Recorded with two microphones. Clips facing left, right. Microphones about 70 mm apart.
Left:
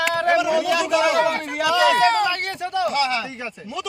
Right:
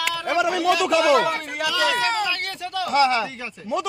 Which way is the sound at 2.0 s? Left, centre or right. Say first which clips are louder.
Left 5 dB; centre.